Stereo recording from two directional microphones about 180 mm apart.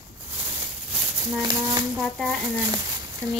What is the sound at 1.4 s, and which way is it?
Speech, 20° right (ahead or behind).